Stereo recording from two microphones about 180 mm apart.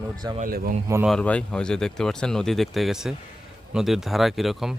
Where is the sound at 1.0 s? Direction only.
5° left (ahead or behind).